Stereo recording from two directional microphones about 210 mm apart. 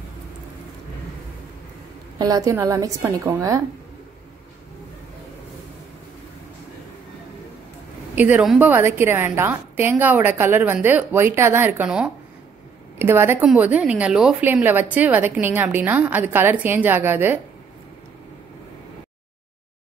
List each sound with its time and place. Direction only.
2.1 s a woman's voice: 15° right (ahead or behind)
8.2 s a woman's voice: 5° right (ahead or behind)